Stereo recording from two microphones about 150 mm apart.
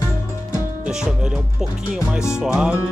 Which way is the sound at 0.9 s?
5° right (ahead or behind).